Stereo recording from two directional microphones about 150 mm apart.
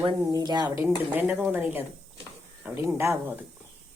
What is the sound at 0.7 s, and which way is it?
A woman's voice, 15° right (ahead or behind).